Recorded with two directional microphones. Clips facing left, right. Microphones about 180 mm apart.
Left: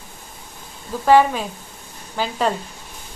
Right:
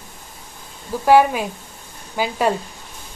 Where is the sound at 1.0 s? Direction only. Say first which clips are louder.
Right 1 dB; 10° right (ahead or behind).